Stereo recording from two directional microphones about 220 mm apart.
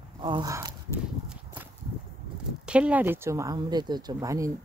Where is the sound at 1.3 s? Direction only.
10° right (ahead or behind).